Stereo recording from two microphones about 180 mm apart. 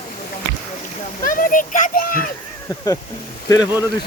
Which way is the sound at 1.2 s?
50° left (ahead or behind).